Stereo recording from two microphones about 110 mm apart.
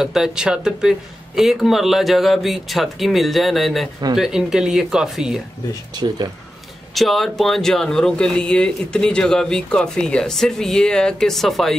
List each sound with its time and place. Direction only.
0.0 s speech: 5° right (ahead or behind)
5.9 s speech: 40° right (ahead or behind)
7.0 s speech: centre (ahead or behind)